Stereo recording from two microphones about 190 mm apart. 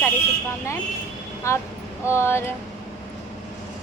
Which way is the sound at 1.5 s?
15° left (ahead or behind).